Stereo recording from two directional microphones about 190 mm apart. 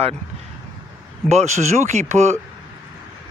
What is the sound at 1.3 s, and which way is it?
Speech, 35° right (ahead or behind).